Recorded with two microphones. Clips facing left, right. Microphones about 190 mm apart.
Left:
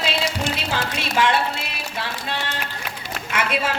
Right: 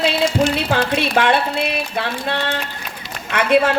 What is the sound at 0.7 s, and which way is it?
Speech, 60° right (ahead or behind).